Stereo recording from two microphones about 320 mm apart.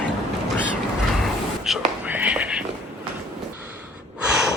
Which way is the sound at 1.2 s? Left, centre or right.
Centre.